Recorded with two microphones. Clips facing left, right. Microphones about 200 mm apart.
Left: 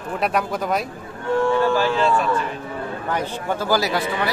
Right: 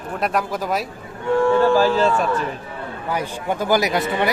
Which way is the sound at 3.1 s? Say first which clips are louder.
Right 1 dB; 15° right (ahead or behind).